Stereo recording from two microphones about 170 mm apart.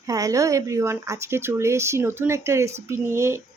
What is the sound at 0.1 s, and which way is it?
Speech, 20° right (ahead or behind).